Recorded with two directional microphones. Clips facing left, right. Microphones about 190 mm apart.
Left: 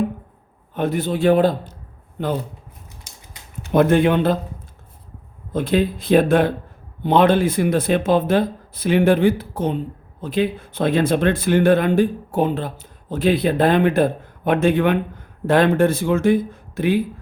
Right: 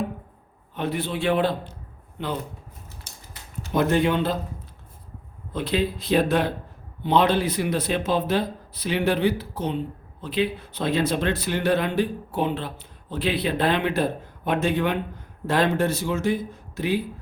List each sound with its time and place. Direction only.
0.8 s speech: 45° left (ahead or behind)
3.1 s a sound: 10° left (ahead or behind)
3.6 s speech: 55° left (ahead or behind)
5.5 s speech: 50° left (ahead or behind)